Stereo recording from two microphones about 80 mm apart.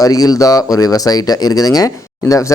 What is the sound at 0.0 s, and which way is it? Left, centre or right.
Speech, left.